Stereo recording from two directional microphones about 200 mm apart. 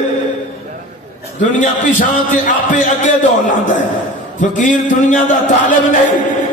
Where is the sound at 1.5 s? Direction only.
40° left (ahead or behind).